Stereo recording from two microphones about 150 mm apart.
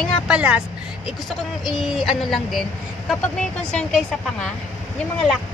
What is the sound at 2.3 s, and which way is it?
Speech, centre (ahead or behind).